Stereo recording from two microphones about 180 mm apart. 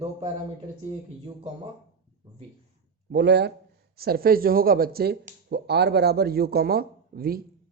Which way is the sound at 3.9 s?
60° right (ahead or behind).